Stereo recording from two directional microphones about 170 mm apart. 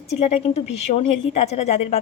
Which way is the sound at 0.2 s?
35° left (ahead or behind).